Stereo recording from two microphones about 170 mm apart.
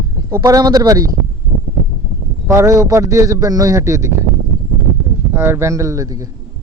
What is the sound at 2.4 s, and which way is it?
A man's voice, 15° right (ahead or behind).